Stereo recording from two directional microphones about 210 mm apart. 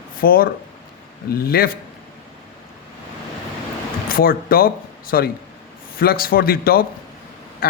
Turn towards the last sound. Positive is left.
turn(degrees=45)  # may be behind; listen again after turning